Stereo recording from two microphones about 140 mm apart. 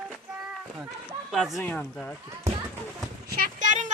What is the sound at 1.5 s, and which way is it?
Speech, 10° left (ahead or behind).